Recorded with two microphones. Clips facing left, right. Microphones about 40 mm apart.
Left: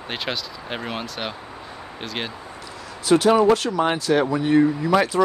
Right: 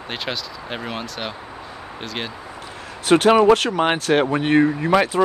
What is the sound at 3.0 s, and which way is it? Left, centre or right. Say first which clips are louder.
Speech: right 2 dB; right.